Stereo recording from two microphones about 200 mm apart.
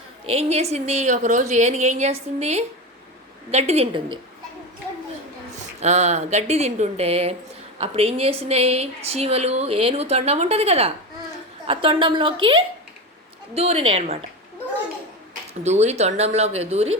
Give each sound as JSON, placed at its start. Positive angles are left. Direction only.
{"t": 0.3, "sound": "a woman's voice", "side_deg": -30}
{"t": 5.8, "sound": "a woman's voice", "side_deg": -35}
{"t": 13.5, "sound": "a woman's voice", "side_deg": -30}
{"t": 15.6, "sound": "a woman's voice", "side_deg": -35}